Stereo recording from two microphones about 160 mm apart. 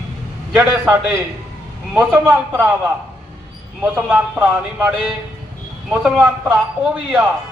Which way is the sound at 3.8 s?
10° right (ahead or behind).